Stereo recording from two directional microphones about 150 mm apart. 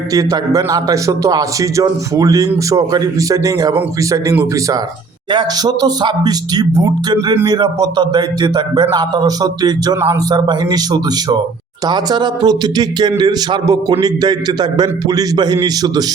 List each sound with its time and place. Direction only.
0.1 s speech: 25° right (ahead or behind)